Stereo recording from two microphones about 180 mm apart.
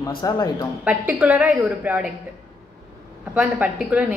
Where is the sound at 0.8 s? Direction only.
10° right (ahead or behind).